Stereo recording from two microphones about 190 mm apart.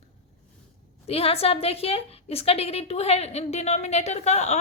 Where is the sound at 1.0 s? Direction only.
30° left (ahead or behind).